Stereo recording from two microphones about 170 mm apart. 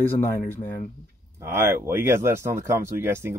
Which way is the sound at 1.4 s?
15° right (ahead or behind).